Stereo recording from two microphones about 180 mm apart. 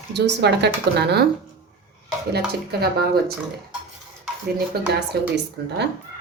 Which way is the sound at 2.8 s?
60° right (ahead or behind).